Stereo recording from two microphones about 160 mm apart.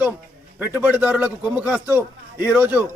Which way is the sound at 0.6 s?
10° right (ahead or behind).